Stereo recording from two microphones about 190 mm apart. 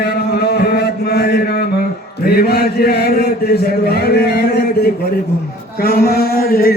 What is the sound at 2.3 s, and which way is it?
A man's voice, 55° left (ahead or behind).